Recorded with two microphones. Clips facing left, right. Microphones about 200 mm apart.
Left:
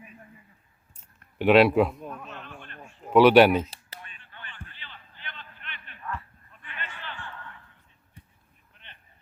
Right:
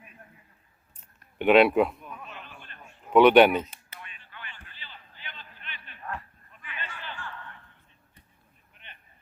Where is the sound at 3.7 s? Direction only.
35° left (ahead or behind).